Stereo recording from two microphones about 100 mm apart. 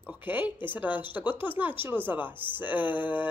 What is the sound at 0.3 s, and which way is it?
Speech, 20° right (ahead or behind).